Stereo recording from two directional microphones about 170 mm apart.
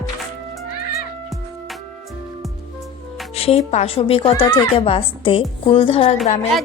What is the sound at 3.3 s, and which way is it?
A woman's voice, 35° left (ahead or behind).